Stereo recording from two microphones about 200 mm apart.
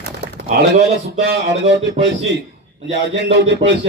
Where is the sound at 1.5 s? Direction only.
60° right (ahead or behind).